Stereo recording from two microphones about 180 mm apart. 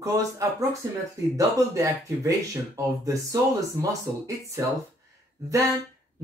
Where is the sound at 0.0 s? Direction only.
15° right (ahead or behind).